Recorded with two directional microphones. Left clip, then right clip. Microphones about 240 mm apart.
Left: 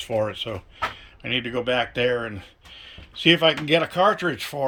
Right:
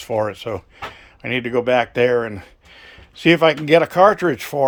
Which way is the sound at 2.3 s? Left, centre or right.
Right.